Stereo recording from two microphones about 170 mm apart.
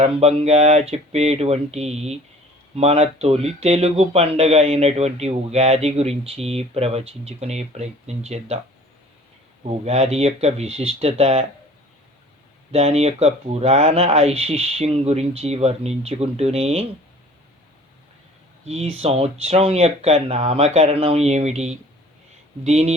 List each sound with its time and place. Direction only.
0.0 s speech: 35° right (ahead or behind)
9.6 s speech: 40° right (ahead or behind)
12.7 s speech: 40° right (ahead or behind)
18.6 s speech: 40° right (ahead or behind)